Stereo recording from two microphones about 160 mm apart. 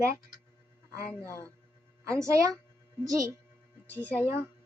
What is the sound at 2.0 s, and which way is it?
A woman's voice, 20° right (ahead or behind).